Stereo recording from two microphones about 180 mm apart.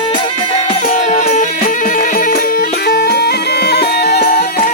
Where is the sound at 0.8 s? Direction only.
45° left (ahead or behind).